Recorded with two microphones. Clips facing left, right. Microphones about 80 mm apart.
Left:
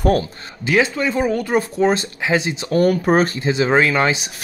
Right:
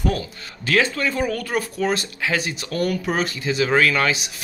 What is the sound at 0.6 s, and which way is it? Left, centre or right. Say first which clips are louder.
Speech: left 3 dB; centre.